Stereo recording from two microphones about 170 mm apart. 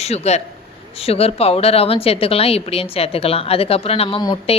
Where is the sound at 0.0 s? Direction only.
40° left (ahead or behind).